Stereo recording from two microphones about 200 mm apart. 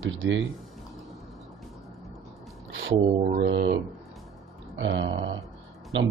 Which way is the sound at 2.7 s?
70° right (ahead or behind).